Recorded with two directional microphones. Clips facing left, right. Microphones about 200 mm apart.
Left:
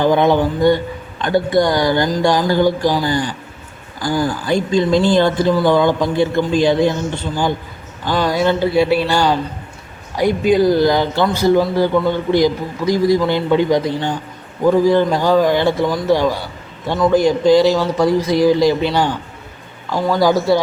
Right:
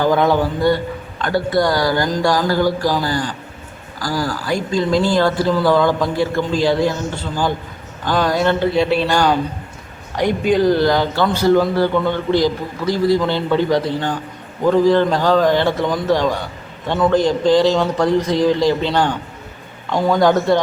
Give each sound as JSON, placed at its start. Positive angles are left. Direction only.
{"t": 0.0, "sound": "a man's voice", "side_deg": 20}